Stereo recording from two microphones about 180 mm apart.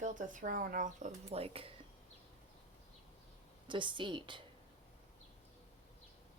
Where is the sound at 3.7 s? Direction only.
25° right (ahead or behind).